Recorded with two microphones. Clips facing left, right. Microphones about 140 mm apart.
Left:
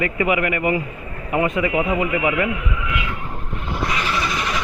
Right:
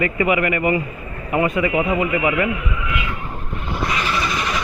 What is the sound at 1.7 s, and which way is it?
Speech, 10° right (ahead or behind).